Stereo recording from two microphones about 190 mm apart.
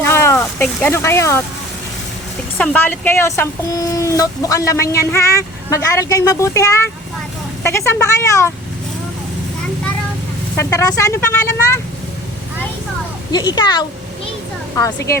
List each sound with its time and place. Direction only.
0.0 s a sound: 15° left (ahead or behind)
2.6 s speech: 10° left (ahead or behind)
10.6 s speech: 15° left (ahead or behind)
13.3 s a child's voice: 20° left (ahead or behind)